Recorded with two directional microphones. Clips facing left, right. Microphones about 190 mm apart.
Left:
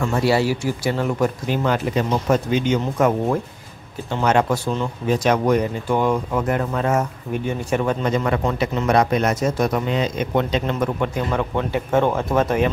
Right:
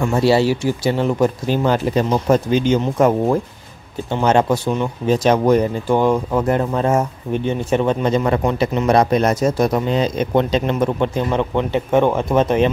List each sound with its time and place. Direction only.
0.0 s speech: 25° right (ahead or behind)